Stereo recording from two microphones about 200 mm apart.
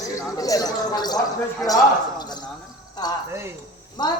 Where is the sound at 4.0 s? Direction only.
20° left (ahead or behind).